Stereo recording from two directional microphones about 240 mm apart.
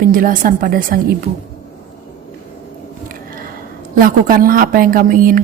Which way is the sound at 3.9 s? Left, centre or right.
Right.